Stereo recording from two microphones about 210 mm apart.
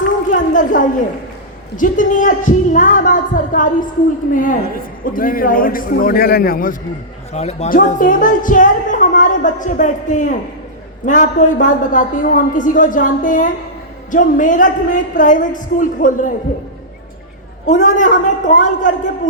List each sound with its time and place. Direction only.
0.3 s a sound: 40° left (ahead or behind)
1.7 s a woman's voice: 40° left (ahead or behind)
5.1 s a man's voice: 40° left (ahead or behind)
7.3 s a woman's voice: 30° left (ahead or behind)
17.7 s a woman's voice: 35° left (ahead or behind)